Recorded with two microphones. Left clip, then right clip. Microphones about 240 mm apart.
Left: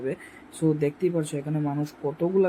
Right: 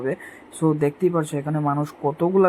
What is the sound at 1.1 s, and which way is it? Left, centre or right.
Speech, centre.